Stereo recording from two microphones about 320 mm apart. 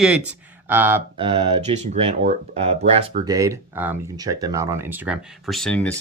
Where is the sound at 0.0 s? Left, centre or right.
Centre.